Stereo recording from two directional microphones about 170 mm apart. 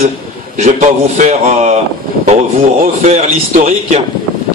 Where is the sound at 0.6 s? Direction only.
45° right (ahead or behind).